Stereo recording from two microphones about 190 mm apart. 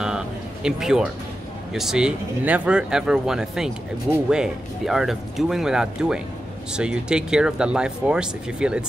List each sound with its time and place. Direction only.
0.7 s speech: 5° right (ahead or behind)